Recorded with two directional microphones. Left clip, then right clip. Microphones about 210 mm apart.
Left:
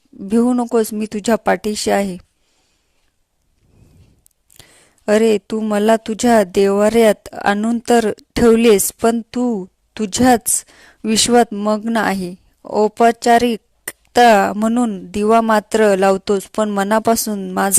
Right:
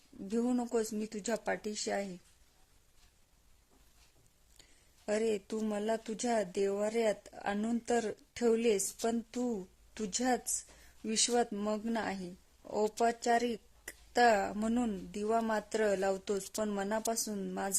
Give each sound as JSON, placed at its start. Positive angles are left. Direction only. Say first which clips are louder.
{"t": 0.3, "sound": "speech", "louder": "left 18 dB", "side_deg": 40}
{"t": 5.0, "sound": "speech", "louder": "left 19 dB", "side_deg": 45}